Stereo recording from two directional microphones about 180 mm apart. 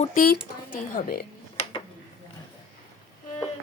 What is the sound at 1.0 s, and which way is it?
Speech, 45° left (ahead or behind).